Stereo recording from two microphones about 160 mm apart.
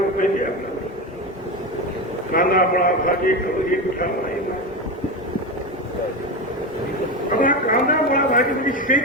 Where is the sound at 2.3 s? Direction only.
65° left (ahead or behind).